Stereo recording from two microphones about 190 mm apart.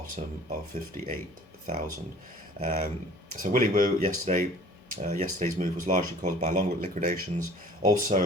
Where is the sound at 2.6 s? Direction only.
50° right (ahead or behind).